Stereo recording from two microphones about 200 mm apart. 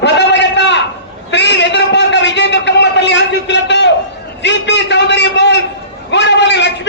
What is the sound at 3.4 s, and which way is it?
A man's voice, 60° left (ahead or behind).